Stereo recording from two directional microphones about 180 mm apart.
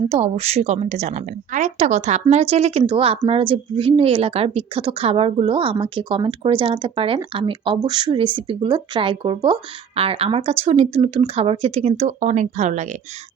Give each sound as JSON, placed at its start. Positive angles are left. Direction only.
{"t": 0.1, "sound": "speech", "side_deg": -35}